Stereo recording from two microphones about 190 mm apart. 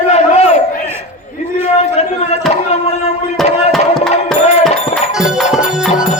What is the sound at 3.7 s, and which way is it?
Music, centre (ahead or behind).